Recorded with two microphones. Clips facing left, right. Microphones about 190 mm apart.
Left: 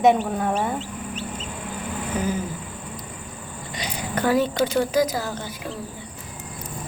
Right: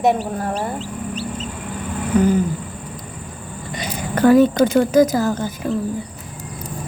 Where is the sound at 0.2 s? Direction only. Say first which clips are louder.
Even; 35° right (ahead or behind).